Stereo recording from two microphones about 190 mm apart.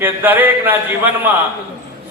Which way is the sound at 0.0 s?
10° right (ahead or behind).